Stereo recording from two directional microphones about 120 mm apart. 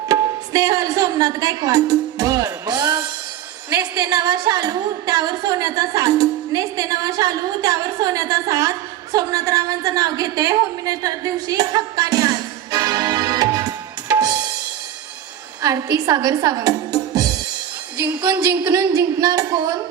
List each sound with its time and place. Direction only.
0.1 s a woman's voice: 30° right (ahead or behind)
14.1 s drum: 30° right (ahead or behind)
15.6 s a woman's voice: 30° right (ahead or behind)